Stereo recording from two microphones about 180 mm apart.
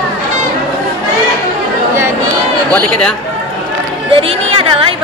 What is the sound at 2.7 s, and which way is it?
Speech, 5° left (ahead or behind).